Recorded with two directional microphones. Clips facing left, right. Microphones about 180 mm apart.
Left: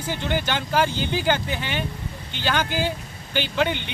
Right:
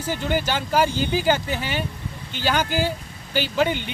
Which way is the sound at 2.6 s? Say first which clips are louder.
Right 2 dB; 40° right (ahead or behind).